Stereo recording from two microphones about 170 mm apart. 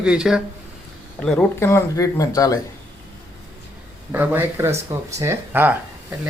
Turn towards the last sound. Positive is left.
turn(degrees=-10)  # may be behind; listen again after turning